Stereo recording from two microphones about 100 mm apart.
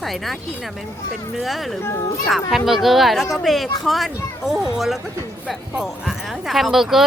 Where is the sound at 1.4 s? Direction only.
Centre (ahead or behind).